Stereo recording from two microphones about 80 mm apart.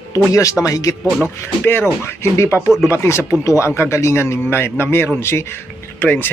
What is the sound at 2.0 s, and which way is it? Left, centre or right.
Speech, left.